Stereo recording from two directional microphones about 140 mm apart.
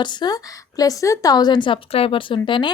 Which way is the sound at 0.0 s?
30° left (ahead or behind).